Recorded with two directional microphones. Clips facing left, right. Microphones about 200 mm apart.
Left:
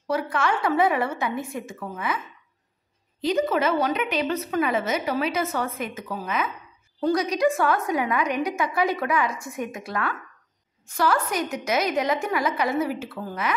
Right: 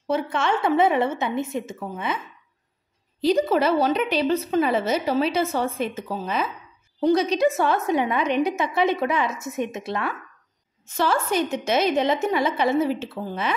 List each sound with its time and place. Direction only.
0.0 s a woman's voice: 25° right (ahead or behind)